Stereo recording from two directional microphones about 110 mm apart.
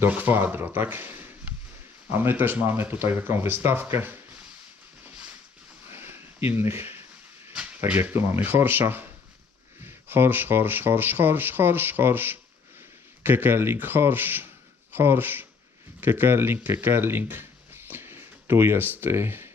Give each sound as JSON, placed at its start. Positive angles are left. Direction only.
{"t": 0.0, "sound": "speech", "side_deg": -15}
{"t": 5.9, "sound": "a sound", "side_deg": -20}
{"t": 7.9, "sound": "speech", "side_deg": -15}